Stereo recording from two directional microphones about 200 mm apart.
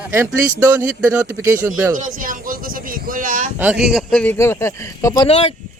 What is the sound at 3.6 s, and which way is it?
Speech, 5° right (ahead or behind).